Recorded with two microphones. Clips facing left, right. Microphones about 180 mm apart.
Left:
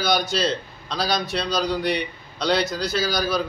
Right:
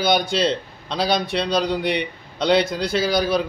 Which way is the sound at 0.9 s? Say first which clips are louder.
Right 3 dB; 25° right (ahead or behind).